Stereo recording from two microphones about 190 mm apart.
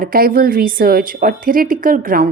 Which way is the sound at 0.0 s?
50° right (ahead or behind).